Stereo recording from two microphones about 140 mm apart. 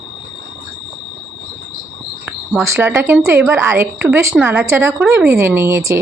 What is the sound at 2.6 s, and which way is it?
Speech, 15° right (ahead or behind).